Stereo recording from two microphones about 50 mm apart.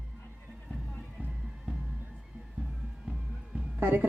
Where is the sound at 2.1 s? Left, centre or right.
Right.